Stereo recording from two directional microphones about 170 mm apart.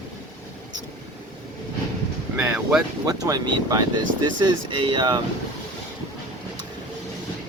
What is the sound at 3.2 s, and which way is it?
Speech, 20° right (ahead or behind).